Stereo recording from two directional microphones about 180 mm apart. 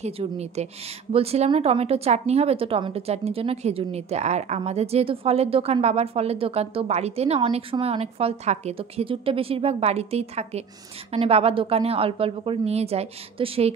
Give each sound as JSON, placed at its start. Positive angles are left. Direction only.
{"t": 0.0, "sound": "a woman's voice", "side_deg": -35}